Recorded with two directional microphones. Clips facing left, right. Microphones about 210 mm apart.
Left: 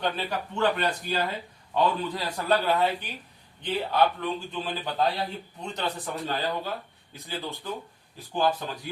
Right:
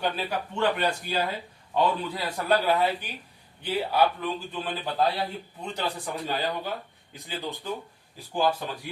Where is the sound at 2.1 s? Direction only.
10° right (ahead or behind).